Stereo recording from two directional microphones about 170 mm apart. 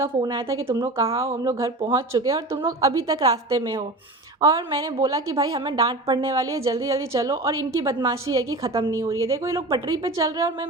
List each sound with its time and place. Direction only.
0.0 s a woman's voice: 20° right (ahead or behind)